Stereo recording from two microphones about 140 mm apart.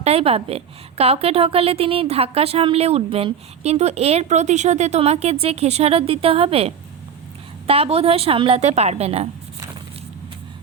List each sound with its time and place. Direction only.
0.0 s a woman's voice: 45° right (ahead or behind)